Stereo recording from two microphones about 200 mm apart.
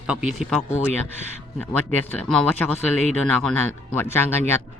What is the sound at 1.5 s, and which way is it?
Speech, 10° left (ahead or behind).